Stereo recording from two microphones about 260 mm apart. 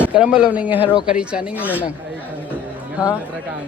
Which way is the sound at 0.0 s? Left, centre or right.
Centre.